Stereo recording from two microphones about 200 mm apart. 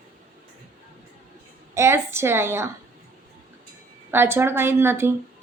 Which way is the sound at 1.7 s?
15° right (ahead or behind).